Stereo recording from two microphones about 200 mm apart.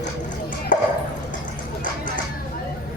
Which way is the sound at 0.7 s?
40° left (ahead or behind).